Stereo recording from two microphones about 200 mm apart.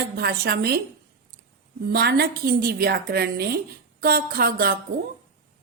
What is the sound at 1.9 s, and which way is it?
A woman's voice, 55° right (ahead or behind).